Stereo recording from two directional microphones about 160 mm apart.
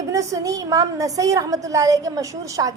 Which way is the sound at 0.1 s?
20° right (ahead or behind).